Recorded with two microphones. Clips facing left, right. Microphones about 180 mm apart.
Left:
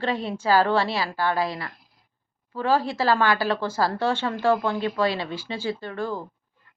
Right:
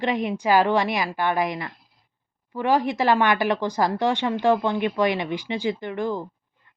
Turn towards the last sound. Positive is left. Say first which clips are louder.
# right 3 dB
turn(degrees=-20)  # may be behind; listen again after turning